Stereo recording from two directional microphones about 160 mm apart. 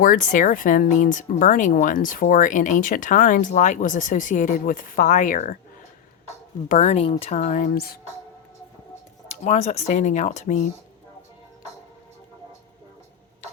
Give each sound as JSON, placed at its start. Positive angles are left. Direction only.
{"t": 0.0, "sound": "speech", "side_deg": 55}
{"t": 6.7, "sound": "speech", "side_deg": 50}
{"t": 9.3, "sound": "speech", "side_deg": 45}